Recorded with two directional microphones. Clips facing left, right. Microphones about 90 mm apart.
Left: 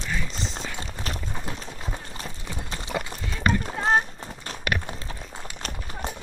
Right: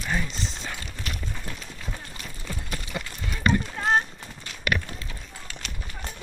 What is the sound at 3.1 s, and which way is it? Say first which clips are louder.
Clip-clop: right 3 dB; 45° left (ahead or behind).